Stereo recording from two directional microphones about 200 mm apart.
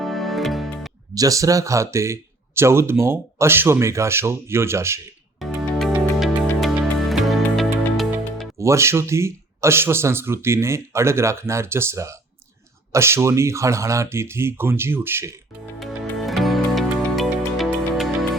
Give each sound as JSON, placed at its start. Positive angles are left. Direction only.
{"t": 0.0, "sound": "music", "side_deg": 0}
{"t": 1.1, "sound": "speech", "side_deg": -15}
{"t": 5.4, "sound": "music", "side_deg": 0}
{"t": 8.5, "sound": "speech", "side_deg": -15}
{"t": 15.8, "sound": "music", "side_deg": 0}